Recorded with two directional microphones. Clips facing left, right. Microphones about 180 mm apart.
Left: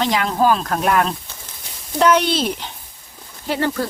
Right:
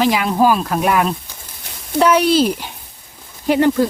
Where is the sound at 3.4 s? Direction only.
15° right (ahead or behind).